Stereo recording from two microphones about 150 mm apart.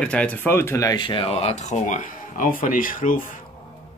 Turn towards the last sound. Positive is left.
turn(degrees=65)  # may be behind; listen again after turning